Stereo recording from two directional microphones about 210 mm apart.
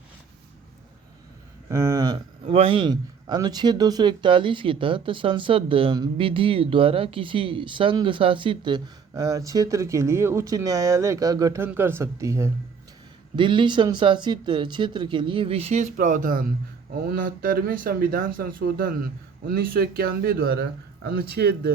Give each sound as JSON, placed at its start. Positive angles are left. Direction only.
{"t": 1.7, "sound": "a man's voice", "side_deg": -15}